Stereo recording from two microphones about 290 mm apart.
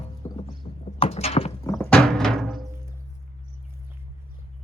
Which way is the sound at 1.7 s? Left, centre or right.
Centre.